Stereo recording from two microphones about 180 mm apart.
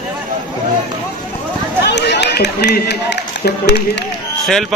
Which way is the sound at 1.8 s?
70° left (ahead or behind).